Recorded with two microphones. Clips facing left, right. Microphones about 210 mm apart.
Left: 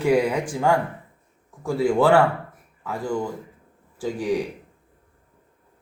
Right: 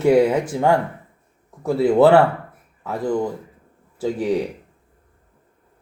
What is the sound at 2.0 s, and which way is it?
A man's voice, 20° right (ahead or behind).